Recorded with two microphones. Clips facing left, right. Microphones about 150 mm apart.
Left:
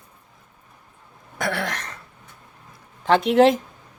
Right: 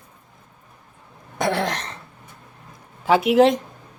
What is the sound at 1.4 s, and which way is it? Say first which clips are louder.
Throat clearing: right 4 dB; 25° right (ahead or behind).